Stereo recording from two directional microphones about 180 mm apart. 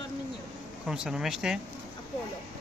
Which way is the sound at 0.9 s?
5° right (ahead or behind).